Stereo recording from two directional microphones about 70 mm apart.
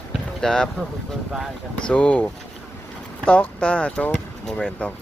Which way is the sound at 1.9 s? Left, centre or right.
Centre.